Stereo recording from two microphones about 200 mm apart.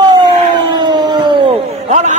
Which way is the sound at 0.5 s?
20° right (ahead or behind).